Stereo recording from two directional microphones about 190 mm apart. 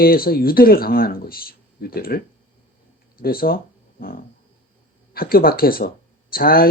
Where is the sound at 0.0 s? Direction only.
50° left (ahead or behind).